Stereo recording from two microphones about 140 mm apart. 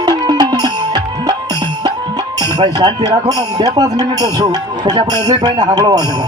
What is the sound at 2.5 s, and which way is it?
Speech, 30° right (ahead or behind).